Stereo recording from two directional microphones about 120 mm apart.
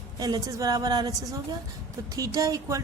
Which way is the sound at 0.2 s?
30° right (ahead or behind).